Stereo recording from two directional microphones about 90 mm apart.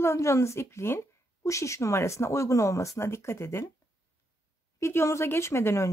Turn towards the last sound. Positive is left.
turn(degrees=30)  # may be behind; listen again after turning